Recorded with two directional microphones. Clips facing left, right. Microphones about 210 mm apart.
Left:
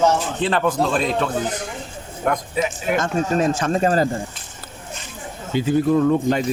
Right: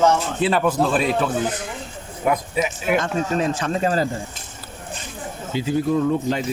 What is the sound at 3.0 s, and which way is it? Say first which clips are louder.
Speech: left 2 dB; 45° left (ahead or behind).